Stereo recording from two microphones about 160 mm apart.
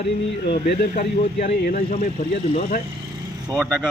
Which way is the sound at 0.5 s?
60° left (ahead or behind).